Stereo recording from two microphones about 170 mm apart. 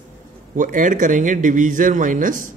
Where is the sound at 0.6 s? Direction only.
50° right (ahead or behind).